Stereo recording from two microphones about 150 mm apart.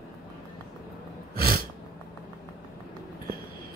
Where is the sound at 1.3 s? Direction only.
90° right.